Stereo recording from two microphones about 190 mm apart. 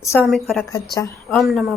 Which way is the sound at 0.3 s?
Centre (ahead or behind).